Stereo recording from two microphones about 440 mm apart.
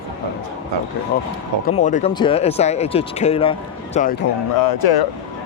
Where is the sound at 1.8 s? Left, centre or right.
Centre.